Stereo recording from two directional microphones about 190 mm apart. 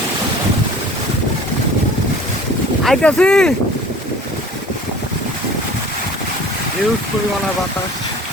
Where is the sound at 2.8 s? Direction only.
Centre (ahead or behind).